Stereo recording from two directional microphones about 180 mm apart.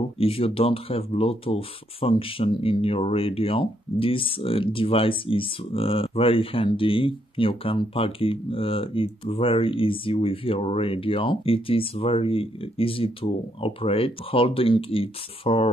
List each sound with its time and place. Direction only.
0.2 s speech: 30° left (ahead or behind)